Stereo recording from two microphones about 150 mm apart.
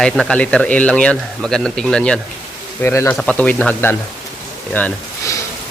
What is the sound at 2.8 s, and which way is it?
Speech, 15° left (ahead or behind).